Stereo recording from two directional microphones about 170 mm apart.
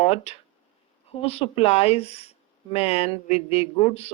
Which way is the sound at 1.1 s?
35° left (ahead or behind).